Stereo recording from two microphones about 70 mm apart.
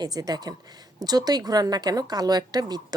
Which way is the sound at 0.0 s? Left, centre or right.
Right.